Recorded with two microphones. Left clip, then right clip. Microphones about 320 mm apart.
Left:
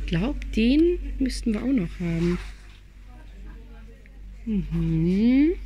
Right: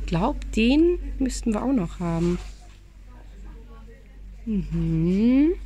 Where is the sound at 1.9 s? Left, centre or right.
Right.